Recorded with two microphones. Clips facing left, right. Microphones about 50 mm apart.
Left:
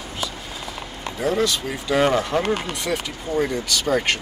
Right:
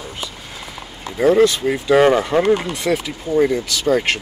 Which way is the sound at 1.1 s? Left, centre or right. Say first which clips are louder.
Right 8 dB; right.